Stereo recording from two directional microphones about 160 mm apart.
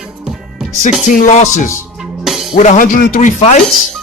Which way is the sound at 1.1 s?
50° left (ahead or behind).